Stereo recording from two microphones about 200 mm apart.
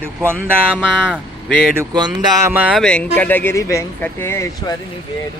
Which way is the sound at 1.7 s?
20° right (ahead or behind).